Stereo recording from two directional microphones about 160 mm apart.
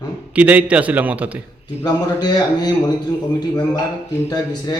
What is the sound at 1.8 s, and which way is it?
A man's voice, 25° left (ahead or behind).